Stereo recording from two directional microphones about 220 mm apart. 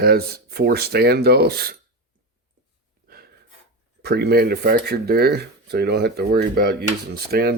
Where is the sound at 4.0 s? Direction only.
45° right (ahead or behind).